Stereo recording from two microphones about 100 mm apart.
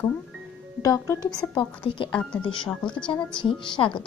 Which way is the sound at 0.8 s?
35° left (ahead or behind).